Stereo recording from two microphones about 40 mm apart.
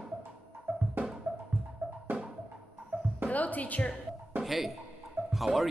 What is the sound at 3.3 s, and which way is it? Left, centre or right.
Speech, left.